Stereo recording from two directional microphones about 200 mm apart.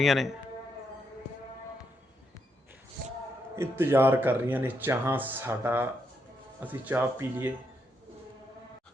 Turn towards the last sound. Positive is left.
turn(degrees=-10)  # may be behind; listen again after turning